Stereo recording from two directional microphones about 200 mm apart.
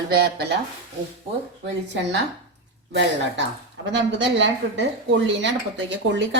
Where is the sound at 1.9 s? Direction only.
60° right (ahead or behind).